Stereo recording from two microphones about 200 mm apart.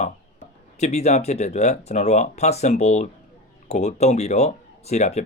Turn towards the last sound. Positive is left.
turn(degrees=35)  # may be behind; listen again after turning